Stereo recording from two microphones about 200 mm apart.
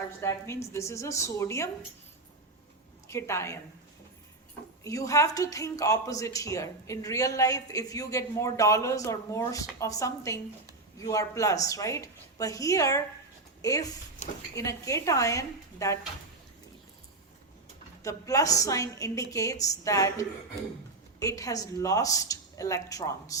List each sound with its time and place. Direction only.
0.2 s a woman's voice: 15° left (ahead or behind)
3.1 s a woman's voice: 15° left (ahead or behind)
4.8 s a woman's voice: 15° left (ahead or behind)
18.0 s a woman's voice: 15° left (ahead or behind)